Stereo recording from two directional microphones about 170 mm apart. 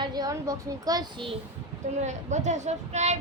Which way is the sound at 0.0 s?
25° right (ahead or behind).